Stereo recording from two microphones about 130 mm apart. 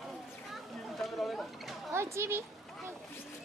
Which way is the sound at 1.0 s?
Centre (ahead or behind).